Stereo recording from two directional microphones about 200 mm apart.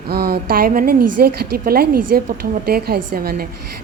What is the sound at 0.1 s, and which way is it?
A woman's voice, 50° right (ahead or behind).